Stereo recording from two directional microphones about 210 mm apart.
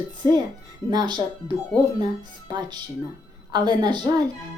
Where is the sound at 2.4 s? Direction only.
20° right (ahead or behind).